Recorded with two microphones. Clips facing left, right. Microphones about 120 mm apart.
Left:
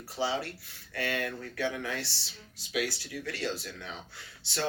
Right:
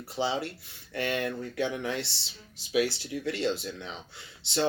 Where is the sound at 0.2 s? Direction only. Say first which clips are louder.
Right 2 dB; 25° right (ahead or behind).